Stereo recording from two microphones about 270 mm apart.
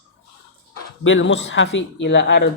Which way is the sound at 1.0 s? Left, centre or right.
Left.